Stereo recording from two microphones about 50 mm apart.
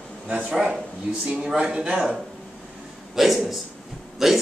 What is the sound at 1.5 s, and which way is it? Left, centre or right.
Speech, centre.